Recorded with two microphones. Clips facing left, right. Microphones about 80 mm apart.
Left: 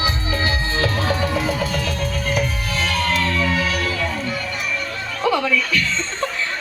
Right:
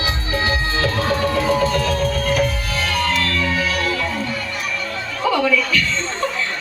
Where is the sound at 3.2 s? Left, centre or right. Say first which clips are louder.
Left 1 dB; centre.